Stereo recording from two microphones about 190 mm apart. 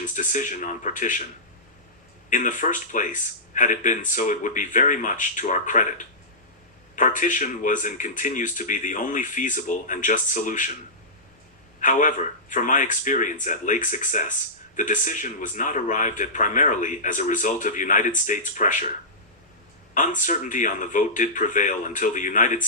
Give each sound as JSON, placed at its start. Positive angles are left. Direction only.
{"t": 0.0, "sound": "speech", "side_deg": 40}
{"t": 2.3, "sound": "speech", "side_deg": 40}
{"t": 11.8, "sound": "speech", "side_deg": 40}
{"t": 19.9, "sound": "speech", "side_deg": 40}